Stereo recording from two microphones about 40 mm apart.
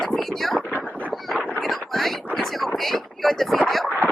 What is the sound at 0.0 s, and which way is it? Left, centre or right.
Speech, centre.